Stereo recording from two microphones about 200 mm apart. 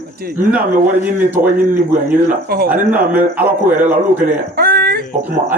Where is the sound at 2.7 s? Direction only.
10° right (ahead or behind).